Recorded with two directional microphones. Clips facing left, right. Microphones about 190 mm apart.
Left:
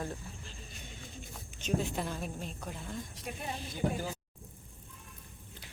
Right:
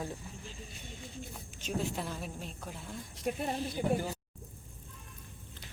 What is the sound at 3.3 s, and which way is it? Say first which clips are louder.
Speech: right 11 dB; 50° right (ahead or behind).